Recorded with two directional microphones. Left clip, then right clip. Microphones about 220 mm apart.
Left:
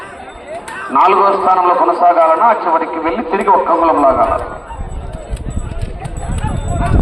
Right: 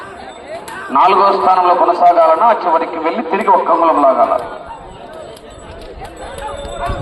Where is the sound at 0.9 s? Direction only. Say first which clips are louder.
Even; 40° right (ahead or behind).